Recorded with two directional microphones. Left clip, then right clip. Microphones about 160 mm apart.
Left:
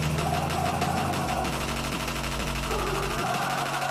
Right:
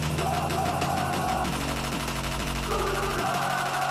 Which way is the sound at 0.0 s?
Centre (ahead or behind).